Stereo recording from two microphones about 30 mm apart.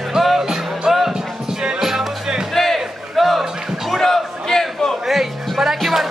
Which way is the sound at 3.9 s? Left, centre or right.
Centre.